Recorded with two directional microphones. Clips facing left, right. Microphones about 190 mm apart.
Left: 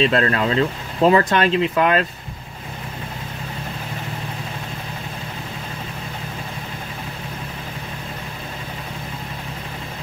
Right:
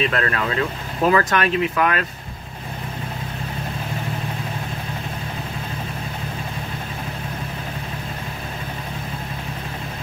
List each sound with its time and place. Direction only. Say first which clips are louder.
0.0 s speech: left 4 dB; 25° left (ahead or behind)